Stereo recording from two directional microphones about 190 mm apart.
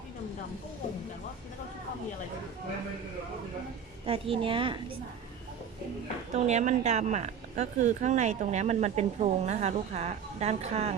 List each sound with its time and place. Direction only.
4.0 s a woman's voice: 30° right (ahead or behind)
6.3 s speech: 35° right (ahead or behind)